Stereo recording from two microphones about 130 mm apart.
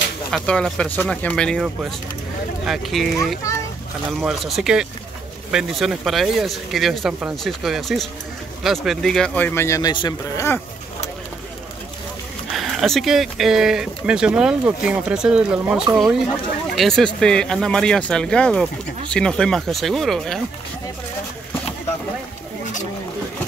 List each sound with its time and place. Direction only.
0.3 s a man's voice: 5° left (ahead or behind)
4.3 s a man's voice: centre (ahead or behind); by 10.4 s 30° left (ahead or behind)
12.5 s speech: centre (ahead or behind)